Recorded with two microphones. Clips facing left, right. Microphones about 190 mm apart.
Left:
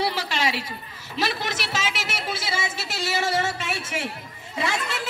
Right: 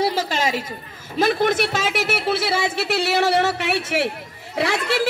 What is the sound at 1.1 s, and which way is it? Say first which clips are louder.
A woman's voice: right 9 dB; 50° right (ahead or behind).